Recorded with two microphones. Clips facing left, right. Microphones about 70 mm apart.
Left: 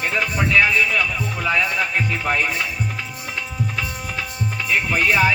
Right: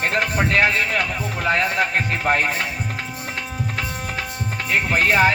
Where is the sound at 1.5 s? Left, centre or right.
Right.